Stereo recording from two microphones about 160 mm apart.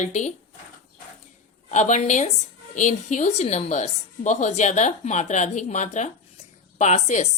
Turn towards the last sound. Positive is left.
turn(degrees=45)  # may be behind; listen again after turning